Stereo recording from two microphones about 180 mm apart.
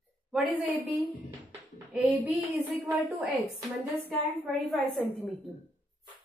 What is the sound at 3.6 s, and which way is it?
Speech, centre (ahead or behind).